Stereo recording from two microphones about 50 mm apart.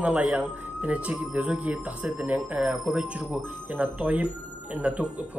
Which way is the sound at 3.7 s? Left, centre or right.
Right.